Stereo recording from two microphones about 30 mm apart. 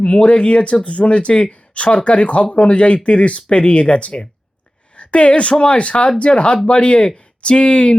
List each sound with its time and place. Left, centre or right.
0.0 s speech: left